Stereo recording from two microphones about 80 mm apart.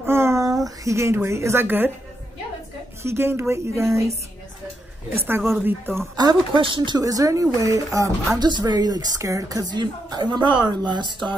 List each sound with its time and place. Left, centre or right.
0.0 s a sound: right
0.7 s speech: right
3.0 s speech: right
5.1 s a woman's voice: right
6.1 s speech: right
7.0 s speech: right
8.4 s a woman's voice: right
9.2 s speech: right
9.8 s a woman's voice: right